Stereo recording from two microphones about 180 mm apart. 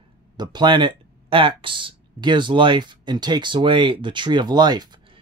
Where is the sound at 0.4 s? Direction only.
25° right (ahead or behind).